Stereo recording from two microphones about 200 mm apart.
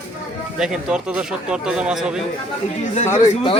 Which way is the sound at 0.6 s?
Centre (ahead or behind).